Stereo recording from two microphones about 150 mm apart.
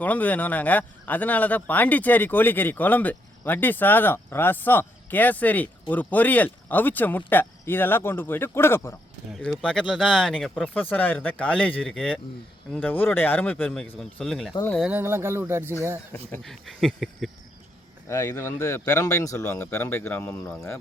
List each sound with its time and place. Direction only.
0.0 s speech: 10° left (ahead or behind)
9.6 s speech: 5° left (ahead or behind)
14.8 s speech: 10° right (ahead or behind)
16.1 s speech: 5° left (ahead or behind)
18.1 s speech: 20° left (ahead or behind)